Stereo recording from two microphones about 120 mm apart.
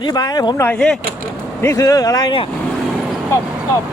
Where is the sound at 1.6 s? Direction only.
25° left (ahead or behind).